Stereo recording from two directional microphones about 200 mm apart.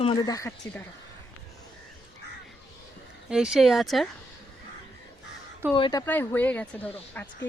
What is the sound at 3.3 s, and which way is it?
Speech, 5° right (ahead or behind).